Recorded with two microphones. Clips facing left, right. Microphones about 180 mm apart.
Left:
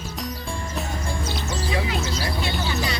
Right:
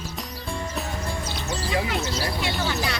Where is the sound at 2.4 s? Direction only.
70° right (ahead or behind).